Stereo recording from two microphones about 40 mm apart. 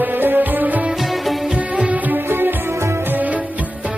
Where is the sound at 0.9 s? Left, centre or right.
Centre.